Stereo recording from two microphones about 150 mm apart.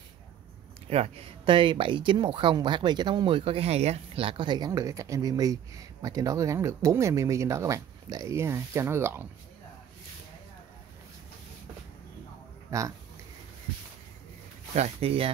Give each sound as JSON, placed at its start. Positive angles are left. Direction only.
{"t": 0.8, "sound": "speech", "side_deg": -45}
{"t": 14.8, "sound": "speech", "side_deg": -40}